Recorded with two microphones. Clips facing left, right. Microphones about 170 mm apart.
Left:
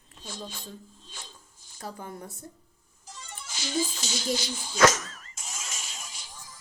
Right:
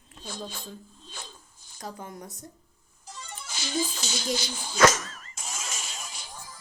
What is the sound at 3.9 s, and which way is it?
Speech, 60° right (ahead or behind).